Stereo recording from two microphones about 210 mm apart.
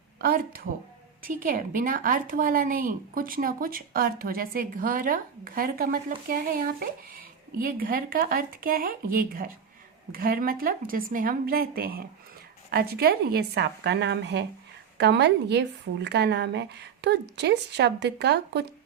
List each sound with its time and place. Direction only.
0.2 s speech: 45° right (ahead or behind)